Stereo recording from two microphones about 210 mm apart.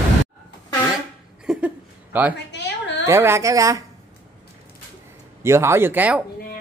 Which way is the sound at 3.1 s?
10° right (ahead or behind).